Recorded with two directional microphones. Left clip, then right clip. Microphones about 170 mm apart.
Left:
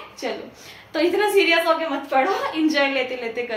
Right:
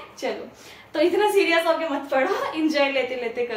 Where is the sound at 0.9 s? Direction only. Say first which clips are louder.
Left 1 dB; 25° left (ahead or behind).